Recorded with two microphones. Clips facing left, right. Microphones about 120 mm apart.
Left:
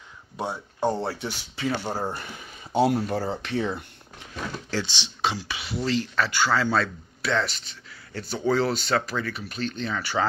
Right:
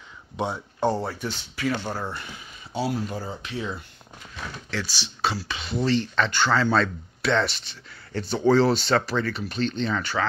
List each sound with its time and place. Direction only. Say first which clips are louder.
0.4 s speech: right 2 dB; 10° left (ahead or behind)
1.0 s speech: even; 20° left (ahead or behind)
2.0 s speech: left 2 dB; 45° left (ahead or behind)
4.6 s speech: even; 25° left (ahead or behind); by 10.1 s 5° left (ahead or behind)